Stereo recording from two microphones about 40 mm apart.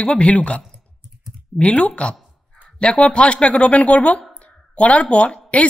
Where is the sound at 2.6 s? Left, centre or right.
Left.